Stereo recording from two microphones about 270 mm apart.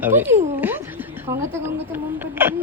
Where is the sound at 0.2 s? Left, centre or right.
Centre.